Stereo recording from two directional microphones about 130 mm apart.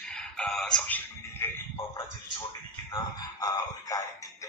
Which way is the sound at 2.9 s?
30° left (ahead or behind).